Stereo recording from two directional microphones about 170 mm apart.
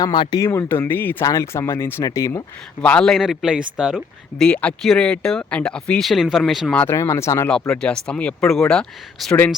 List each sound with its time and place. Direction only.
0.0 s speech: 25° left (ahead or behind)
2.8 s speech: 5° left (ahead or behind)
6.8 s speech: 15° left (ahead or behind)